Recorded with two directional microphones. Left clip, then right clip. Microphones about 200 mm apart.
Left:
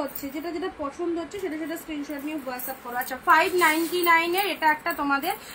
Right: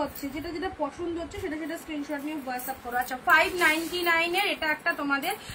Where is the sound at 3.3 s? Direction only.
15° right (ahead or behind).